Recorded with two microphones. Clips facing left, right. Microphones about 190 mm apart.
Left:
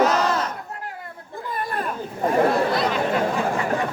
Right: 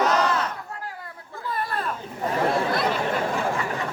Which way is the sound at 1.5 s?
15° left (ahead or behind).